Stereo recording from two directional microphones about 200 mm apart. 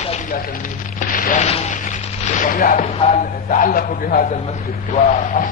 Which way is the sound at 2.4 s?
45° left (ahead or behind).